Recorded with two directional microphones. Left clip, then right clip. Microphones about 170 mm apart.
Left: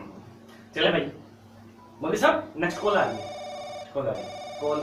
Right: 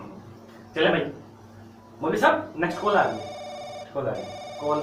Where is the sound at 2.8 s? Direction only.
Centre (ahead or behind).